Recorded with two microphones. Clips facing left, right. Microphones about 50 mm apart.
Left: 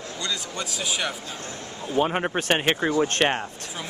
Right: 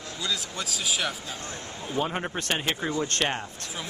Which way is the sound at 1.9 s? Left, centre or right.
Left.